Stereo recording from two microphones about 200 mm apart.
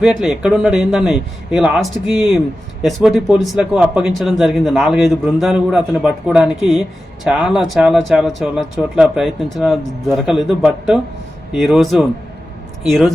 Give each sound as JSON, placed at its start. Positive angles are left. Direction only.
{"t": 0.0, "sound": "speech", "side_deg": -5}